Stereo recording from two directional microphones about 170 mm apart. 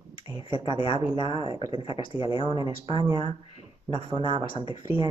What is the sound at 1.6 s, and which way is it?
Speech, 30° left (ahead or behind).